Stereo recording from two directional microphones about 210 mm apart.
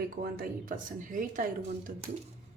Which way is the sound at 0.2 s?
45° right (ahead or behind).